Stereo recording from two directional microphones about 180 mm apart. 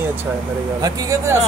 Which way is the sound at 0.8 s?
20° right (ahead or behind).